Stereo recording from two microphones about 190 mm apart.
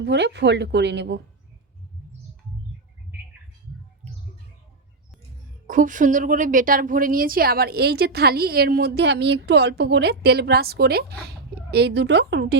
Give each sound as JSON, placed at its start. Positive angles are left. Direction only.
{"t": 0.0, "sound": "a woman's voice", "side_deg": -65}
{"t": 5.6, "sound": "a woman's voice", "side_deg": -45}